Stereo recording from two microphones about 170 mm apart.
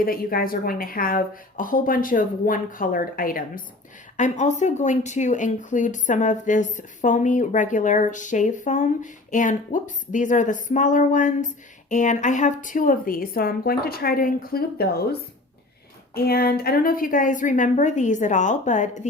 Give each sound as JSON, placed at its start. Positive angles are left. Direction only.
{"t": 0.0, "sound": "a woman's voice", "side_deg": 60}
{"t": 4.2, "sound": "a woman's voice", "side_deg": 45}